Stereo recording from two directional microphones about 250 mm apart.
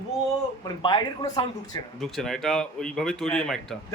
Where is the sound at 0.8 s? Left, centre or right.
Centre.